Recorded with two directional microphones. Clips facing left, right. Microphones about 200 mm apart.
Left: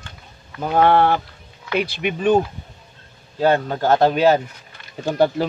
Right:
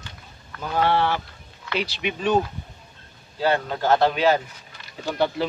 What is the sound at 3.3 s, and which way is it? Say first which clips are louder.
Speech: left 5 dB; 45° left (ahead or behind).